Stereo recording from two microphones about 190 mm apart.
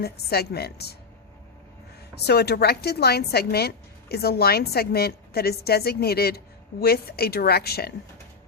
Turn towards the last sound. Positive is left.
turn(degrees=55)  # may be behind; listen again after turning